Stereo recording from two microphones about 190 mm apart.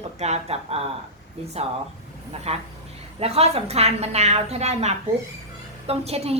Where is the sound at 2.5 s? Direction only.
35° right (ahead or behind).